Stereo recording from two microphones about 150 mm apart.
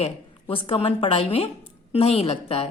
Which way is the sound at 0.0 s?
40° left (ahead or behind).